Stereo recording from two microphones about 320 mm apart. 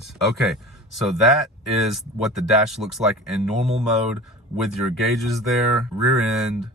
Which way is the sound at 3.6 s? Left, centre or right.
Centre.